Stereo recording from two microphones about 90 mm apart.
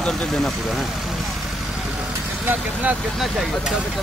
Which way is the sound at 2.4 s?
20° right (ahead or behind).